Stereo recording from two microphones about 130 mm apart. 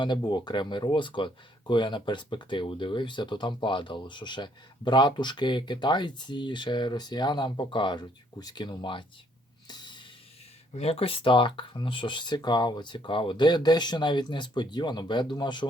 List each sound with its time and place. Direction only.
0.0 s speech: 35° left (ahead or behind)
9.6 s snort: 35° left (ahead or behind)
10.8 s speech: 50° left (ahead or behind)